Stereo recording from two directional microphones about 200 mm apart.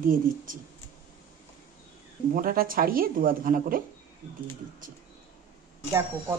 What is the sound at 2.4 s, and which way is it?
Speech, 45° right (ahead or behind).